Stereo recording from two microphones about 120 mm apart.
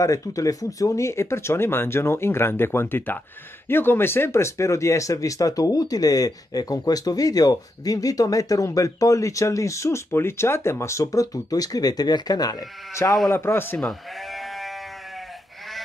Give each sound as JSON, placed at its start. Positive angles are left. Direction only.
{"t": 0.0, "sound": "speech", "side_deg": 25}
{"t": 13.8, "sound": "sheep", "side_deg": 0}